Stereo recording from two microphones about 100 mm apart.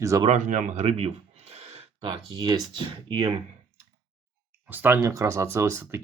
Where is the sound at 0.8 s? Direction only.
90° right; by 2.6 s 50° right (ahead or behind).